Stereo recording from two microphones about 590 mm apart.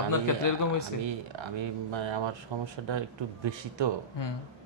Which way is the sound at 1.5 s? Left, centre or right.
Right.